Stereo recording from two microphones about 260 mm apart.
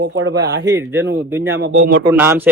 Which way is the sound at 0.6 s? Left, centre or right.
Centre.